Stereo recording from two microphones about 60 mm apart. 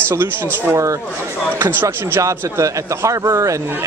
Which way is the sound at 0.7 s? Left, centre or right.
Right.